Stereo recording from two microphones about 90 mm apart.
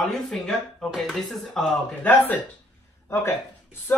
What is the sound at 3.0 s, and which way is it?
Speech, 30° left (ahead or behind).